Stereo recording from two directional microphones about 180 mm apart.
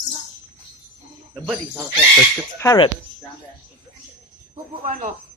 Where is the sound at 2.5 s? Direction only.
20° left (ahead or behind).